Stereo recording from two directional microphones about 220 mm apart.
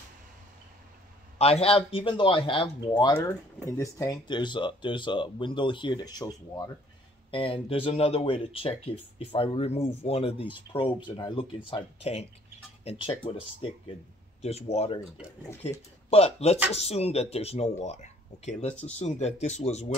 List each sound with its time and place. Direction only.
1.4 s speech: 25° left (ahead or behind)
3.2 s speech: 10° left (ahead or behind); by 19.9 s 30° left (ahead or behind)